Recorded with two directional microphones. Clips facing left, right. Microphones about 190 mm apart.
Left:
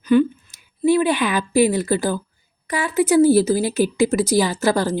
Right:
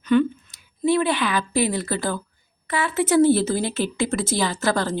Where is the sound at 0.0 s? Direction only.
10° left (ahead or behind).